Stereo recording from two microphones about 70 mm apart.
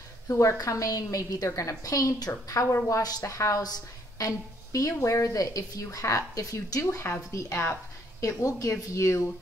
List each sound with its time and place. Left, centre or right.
0.3 s a woman's voice: left
3.3 s a woman's voice: left
3.6 s a sound: left
4.7 s a woman's voice: left